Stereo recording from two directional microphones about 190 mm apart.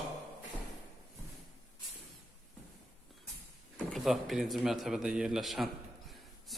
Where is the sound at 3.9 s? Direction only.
Centre (ahead or behind).